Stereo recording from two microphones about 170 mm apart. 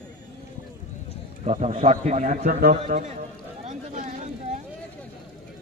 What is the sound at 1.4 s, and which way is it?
A man's voice, 40° right (ahead or behind).